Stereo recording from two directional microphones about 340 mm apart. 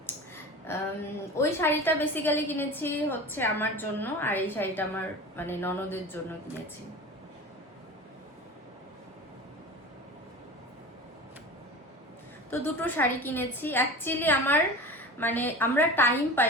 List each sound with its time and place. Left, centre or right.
0.7 s a sound: centre
1.4 s a woman's voice: centre
12.5 s a woman's voice: centre